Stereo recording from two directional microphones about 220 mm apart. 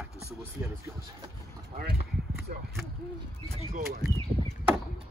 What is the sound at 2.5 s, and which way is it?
Speech, 45° right (ahead or behind).